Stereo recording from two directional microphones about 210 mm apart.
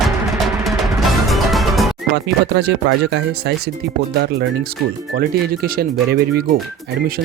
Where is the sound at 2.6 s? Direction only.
55° right (ahead or behind).